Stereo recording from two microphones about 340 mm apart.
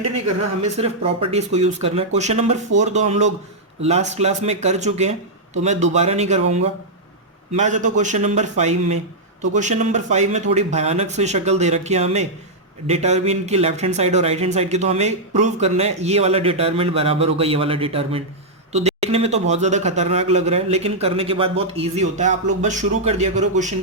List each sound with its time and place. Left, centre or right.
0.6 s speech: centre